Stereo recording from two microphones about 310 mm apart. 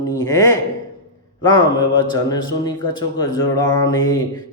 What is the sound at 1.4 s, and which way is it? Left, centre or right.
A man's voice, centre.